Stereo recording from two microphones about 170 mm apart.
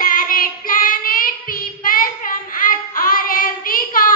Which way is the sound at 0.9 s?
55° left (ahead or behind).